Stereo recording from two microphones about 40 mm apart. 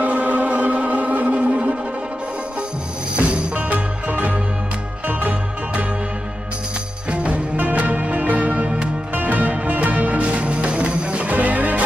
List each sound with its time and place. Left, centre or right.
0.0 s music: right
3.2 s music: right
3.7 s music: right
7.5 s music: right
11.3 s music: right